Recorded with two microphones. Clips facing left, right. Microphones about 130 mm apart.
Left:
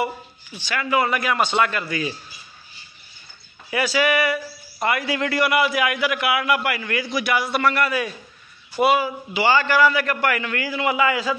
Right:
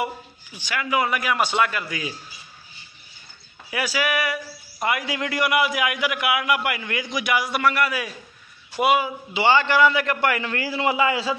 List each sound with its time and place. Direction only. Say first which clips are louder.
0.6 s a man's voice: left 2 dB; 10° right (ahead or behind)
3.7 s a man's voice: left 4 dB; 10° right (ahead or behind); by 11.3 s 25° right (ahead or behind)